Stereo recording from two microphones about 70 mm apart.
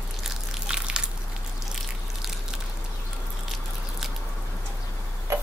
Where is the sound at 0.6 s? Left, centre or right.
Centre.